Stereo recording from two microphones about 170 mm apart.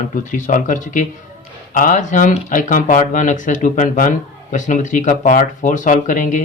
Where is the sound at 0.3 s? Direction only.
50° left (ahead or behind).